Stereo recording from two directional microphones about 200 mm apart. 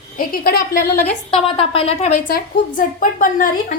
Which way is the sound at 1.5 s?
30° left (ahead or behind).